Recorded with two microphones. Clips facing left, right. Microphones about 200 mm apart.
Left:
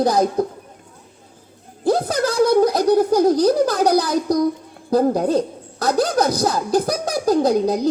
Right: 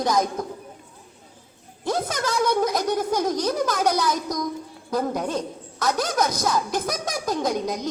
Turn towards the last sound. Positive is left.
turn(degrees=35)  # may be behind; listen again after turning